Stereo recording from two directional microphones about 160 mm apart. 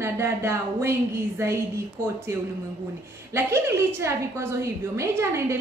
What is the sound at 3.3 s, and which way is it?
A woman's voice, 15° right (ahead or behind).